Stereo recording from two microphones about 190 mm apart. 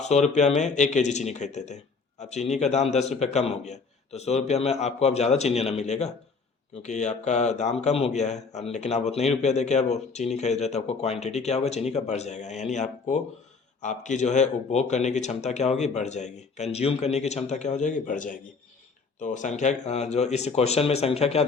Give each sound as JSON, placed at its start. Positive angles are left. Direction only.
{"t": 0.0, "sound": "speech", "side_deg": 35}